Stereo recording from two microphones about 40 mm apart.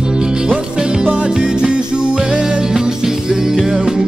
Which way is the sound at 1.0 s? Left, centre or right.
Right.